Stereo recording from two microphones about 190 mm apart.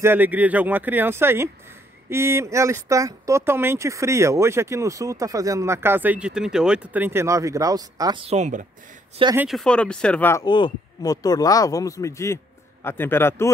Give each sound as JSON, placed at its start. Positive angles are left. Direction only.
{"t": 0.0, "sound": "speech", "side_deg": -10}
{"t": 9.2, "sound": "speech", "side_deg": -15}
{"t": 9.5, "sound": "speech", "side_deg": 5}
{"t": 10.4, "sound": "a man's voice", "side_deg": 25}